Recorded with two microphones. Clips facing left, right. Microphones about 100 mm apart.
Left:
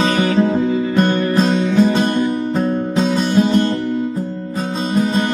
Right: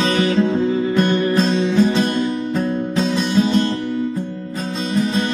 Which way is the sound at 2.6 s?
25° left (ahead or behind).